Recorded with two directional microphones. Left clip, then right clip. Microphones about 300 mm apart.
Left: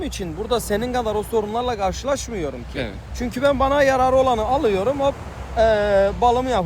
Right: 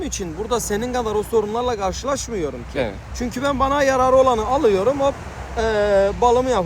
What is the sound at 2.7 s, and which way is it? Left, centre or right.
Speech, centre.